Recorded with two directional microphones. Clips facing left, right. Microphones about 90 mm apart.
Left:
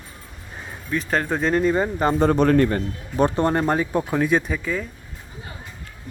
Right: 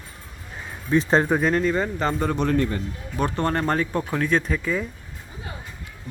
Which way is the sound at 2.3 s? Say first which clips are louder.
Left 5 dB; 50° left (ahead or behind).